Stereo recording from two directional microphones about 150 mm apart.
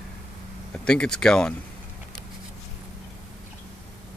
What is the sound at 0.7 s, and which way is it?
Speech, 5° left (ahead or behind).